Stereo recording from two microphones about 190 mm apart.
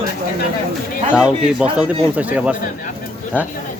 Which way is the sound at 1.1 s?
5° right (ahead or behind).